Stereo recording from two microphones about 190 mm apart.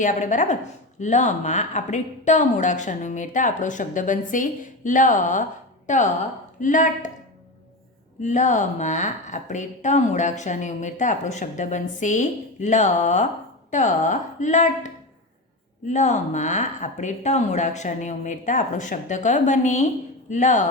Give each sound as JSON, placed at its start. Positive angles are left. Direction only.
{"t": 0.0, "sound": "speech", "side_deg": 40}
{"t": 8.2, "sound": "speech", "side_deg": 40}